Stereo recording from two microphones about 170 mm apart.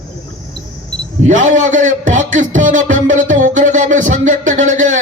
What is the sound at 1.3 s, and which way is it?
Music, 45° right (ahead or behind).